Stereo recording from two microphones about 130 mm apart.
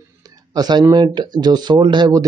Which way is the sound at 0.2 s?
30° right (ahead or behind).